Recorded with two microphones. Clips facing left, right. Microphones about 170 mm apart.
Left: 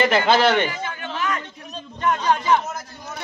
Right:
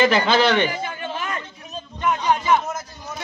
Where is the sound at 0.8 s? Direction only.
30° right (ahead or behind).